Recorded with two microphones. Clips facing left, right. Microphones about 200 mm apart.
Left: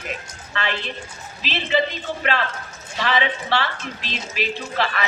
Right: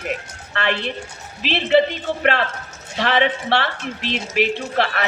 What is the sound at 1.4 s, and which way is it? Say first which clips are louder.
Speech: right 7 dB; 65° right (ahead or behind).